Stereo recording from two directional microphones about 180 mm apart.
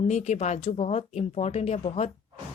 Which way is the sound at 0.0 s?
40° left (ahead or behind).